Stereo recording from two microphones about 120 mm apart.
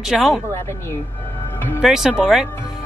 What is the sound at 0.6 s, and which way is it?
Speech, 25° left (ahead or behind).